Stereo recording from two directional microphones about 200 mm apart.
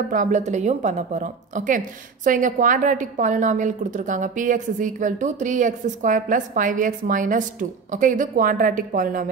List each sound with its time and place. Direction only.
0.1 s a woman's voice: 40° right (ahead or behind)